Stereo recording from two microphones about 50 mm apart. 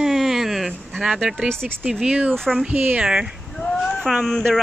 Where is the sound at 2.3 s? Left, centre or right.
Centre.